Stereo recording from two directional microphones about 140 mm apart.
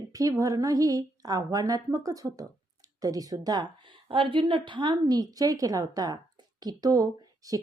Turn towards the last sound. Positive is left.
turn(degrees=-25)  # may be behind; listen again after turning